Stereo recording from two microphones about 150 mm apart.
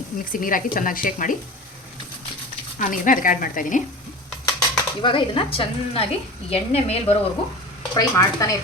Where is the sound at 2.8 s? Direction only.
65° left (ahead or behind).